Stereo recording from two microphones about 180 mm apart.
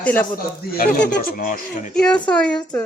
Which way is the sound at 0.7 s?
55° left (ahead or behind).